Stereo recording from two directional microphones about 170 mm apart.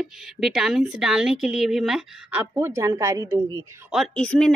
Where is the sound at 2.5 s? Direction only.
15° right (ahead or behind).